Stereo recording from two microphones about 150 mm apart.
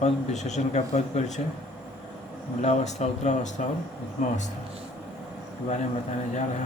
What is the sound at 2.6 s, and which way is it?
Speech, 50° left (ahead or behind).